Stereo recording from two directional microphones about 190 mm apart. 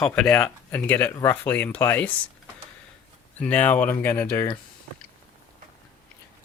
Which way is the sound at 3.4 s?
10° left (ahead or behind).